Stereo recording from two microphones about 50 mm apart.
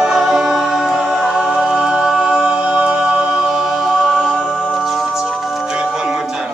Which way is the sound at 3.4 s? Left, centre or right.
Centre.